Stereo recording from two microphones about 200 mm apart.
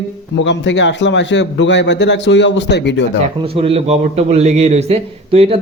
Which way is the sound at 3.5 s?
30° right (ahead or behind).